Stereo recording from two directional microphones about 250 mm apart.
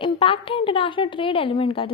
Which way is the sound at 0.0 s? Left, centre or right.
Left.